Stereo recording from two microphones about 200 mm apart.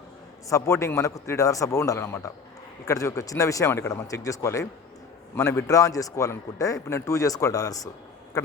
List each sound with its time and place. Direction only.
0.4 s a man's voice: 15° left (ahead or behind)